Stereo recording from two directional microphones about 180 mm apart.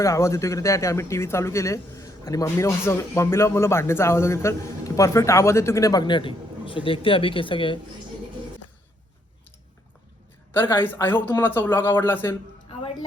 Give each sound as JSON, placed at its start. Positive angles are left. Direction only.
{"t": 0.0, "sound": "speech", "side_deg": 15}
{"t": 10.5, "sound": "speech", "side_deg": 15}